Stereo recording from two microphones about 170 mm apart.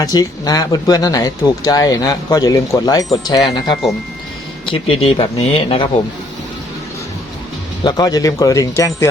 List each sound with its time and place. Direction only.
0.0 s speech: 20° left (ahead or behind)
4.6 s speech: 30° left (ahead or behind)
7.9 s speech: 20° left (ahead or behind)